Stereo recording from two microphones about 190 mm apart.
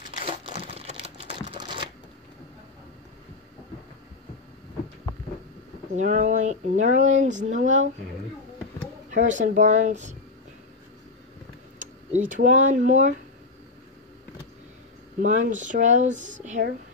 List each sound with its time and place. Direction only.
0.2 s crumpling: 30° right (ahead or behind)
5.9 s speech: 40° right (ahead or behind)
9.4 s speech: 40° right (ahead or behind)
11.8 s speech: 40° right (ahead or behind)
15.1 s speech: 40° right (ahead or behind)